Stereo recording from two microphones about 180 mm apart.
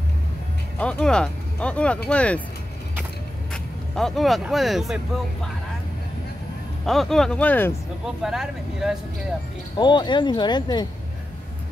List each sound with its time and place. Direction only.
0.7 s speech: 5° left (ahead or behind)
3.5 s speech: centre (ahead or behind)
6.9 s speech: centre (ahead or behind)
8.2 s speech: centre (ahead or behind)
9.8 s speech: 25° left (ahead or behind)